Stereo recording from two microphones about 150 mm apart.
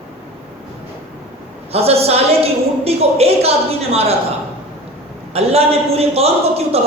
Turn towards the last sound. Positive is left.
turn(degrees=-45)  # may be behind; listen again after turning